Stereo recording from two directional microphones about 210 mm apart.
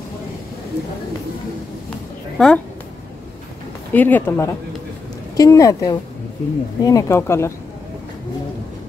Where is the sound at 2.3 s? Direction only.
5° left (ahead or behind).